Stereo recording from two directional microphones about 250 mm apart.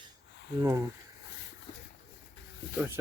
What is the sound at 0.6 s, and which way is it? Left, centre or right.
Speech, centre.